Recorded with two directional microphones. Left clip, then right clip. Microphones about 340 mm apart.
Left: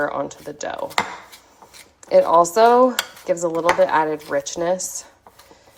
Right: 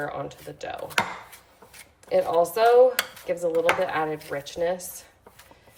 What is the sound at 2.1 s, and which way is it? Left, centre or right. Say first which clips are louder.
Speech: left 8 dB; centre.